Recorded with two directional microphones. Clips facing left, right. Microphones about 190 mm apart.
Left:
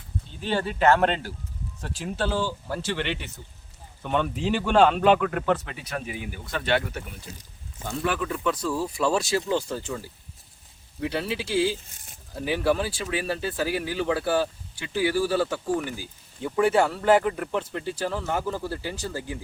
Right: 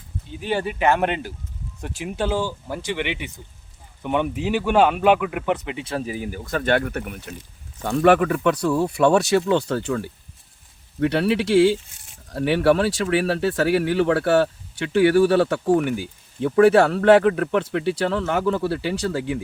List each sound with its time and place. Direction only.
0.3 s speech: 10° right (ahead or behind); by 19.4 s 70° right (ahead or behind)